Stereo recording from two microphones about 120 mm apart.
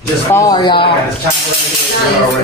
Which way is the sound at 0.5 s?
40° left (ahead or behind).